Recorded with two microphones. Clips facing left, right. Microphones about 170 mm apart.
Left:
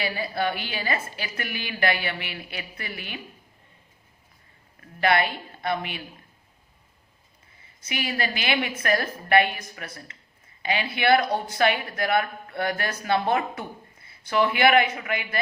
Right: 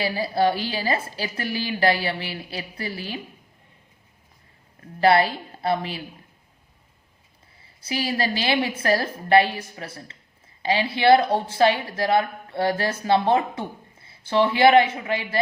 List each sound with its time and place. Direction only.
0.0 s a woman's voice: 30° right (ahead or behind)
4.8 s a woman's voice: 35° right (ahead or behind)
7.6 s a woman's voice: 30° right (ahead or behind)